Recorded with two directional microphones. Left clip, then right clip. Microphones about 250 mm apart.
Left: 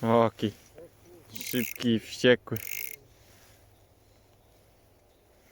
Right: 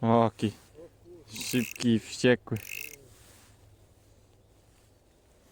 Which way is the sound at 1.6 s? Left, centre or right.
Centre.